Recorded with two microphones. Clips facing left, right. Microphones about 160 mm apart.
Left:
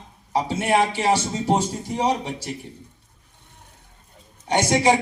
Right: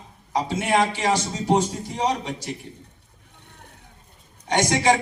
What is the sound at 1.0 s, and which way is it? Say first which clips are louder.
A man's voice: left 2 dB; 10° left (ahead or behind).